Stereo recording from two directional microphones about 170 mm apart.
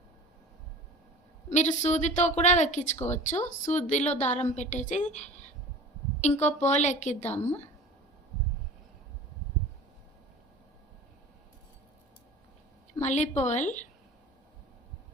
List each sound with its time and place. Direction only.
1.5 s a woman's voice: 45° left (ahead or behind)
13.0 s speech: 45° left (ahead or behind)